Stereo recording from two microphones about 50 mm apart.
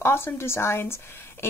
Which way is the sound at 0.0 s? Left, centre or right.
Left.